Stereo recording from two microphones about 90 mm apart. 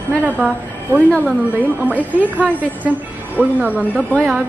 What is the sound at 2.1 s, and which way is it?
A woman's voice, 20° right (ahead or behind).